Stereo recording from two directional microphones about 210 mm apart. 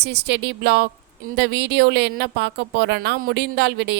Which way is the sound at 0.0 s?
55° right (ahead or behind).